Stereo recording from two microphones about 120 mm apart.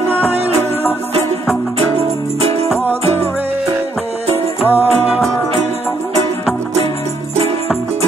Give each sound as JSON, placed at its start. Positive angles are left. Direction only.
{"t": 1.8, "sound": "music", "side_deg": -55}
{"t": 4.3, "sound": "music", "side_deg": -60}